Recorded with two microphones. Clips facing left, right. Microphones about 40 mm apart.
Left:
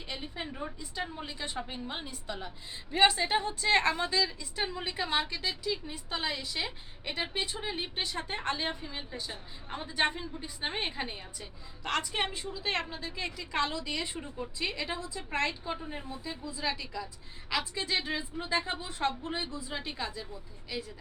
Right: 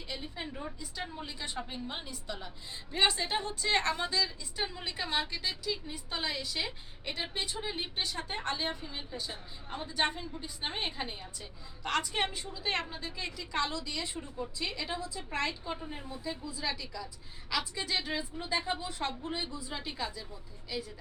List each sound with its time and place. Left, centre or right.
0.1 s a woman's voice: centre
10.0 s a woman's voice: centre
13.8 s a woman's voice: left